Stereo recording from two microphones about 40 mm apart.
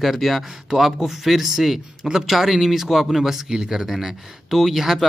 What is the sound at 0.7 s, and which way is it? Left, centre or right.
Speech, centre.